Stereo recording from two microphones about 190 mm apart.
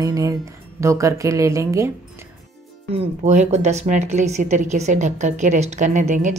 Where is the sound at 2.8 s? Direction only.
35° right (ahead or behind).